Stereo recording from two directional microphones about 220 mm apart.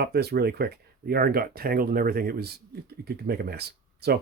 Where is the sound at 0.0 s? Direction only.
45° right (ahead or behind).